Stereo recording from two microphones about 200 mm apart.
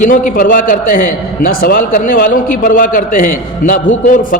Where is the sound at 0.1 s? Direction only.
45° left (ahead or behind).